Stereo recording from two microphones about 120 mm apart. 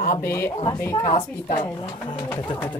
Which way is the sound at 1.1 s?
90° left.